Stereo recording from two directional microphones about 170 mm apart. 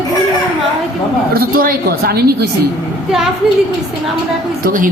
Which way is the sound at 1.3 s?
60° right (ahead or behind).